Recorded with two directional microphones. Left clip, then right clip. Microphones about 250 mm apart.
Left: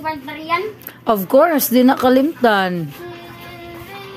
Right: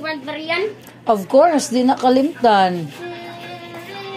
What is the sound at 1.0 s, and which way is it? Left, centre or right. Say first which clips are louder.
A woman's voice: even; left.